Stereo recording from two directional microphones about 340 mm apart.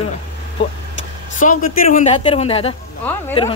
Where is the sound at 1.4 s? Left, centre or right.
Left.